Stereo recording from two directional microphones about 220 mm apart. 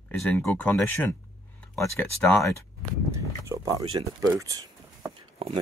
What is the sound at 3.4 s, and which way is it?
Speech, 15° right (ahead or behind).